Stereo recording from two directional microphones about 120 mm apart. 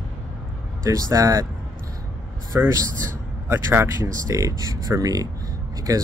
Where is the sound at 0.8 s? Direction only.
25° right (ahead or behind).